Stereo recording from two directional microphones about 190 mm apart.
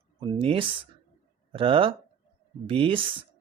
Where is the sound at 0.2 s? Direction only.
25° right (ahead or behind).